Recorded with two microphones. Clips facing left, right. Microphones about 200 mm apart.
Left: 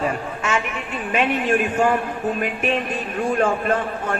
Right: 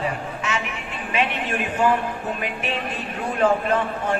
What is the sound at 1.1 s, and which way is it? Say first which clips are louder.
Speech: left 5 dB; 50° left (ahead or behind).